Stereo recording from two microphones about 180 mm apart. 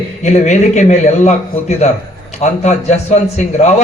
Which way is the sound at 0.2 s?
40° left (ahead or behind).